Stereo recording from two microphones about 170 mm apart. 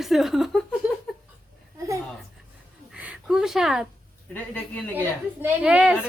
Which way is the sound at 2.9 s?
5° right (ahead or behind).